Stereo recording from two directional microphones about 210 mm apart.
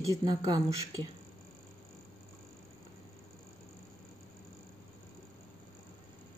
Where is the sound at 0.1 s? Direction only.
20° right (ahead or behind).